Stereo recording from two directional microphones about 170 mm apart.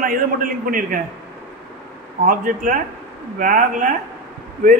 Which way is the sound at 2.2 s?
50° right (ahead or behind).